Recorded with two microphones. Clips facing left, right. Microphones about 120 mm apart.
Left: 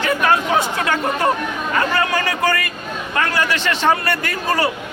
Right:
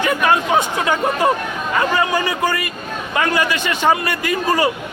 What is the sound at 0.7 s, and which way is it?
A man's voice, 20° right (ahead or behind).